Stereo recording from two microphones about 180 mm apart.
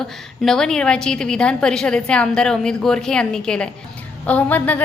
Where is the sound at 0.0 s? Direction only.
5° left (ahead or behind).